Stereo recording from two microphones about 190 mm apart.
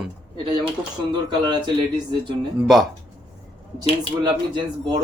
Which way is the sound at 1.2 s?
20° right (ahead or behind).